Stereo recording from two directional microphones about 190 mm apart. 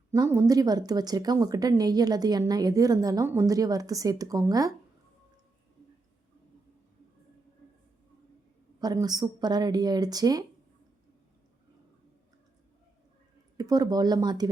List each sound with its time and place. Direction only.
0.1 s speech: 15° right (ahead or behind)
8.8 s speech: 20° right (ahead or behind)
13.6 s speech: 20° right (ahead or behind)